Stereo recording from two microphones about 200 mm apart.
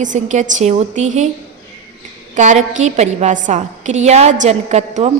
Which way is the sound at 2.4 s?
40° right (ahead or behind).